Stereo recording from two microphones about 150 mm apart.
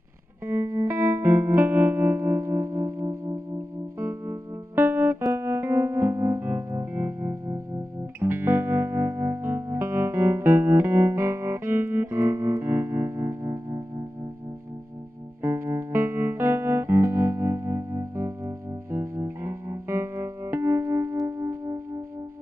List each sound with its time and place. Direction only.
0.5 s music: 15° right (ahead or behind)
15.4 s music: 15° right (ahead or behind)